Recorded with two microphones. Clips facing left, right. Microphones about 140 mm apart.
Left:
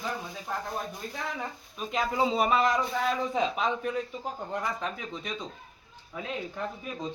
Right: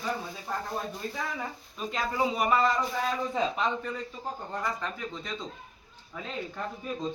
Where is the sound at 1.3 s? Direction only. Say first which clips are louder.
Even; centre (ahead or behind).